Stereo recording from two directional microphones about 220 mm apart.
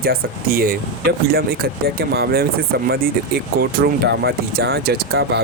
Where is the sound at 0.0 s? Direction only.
45° right (ahead or behind).